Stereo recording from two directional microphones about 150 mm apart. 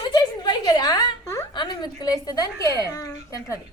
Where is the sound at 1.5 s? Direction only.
30° left (ahead or behind).